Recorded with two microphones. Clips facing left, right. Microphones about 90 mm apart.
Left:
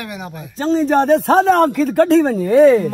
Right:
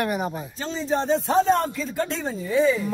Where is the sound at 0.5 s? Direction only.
40° left (ahead or behind).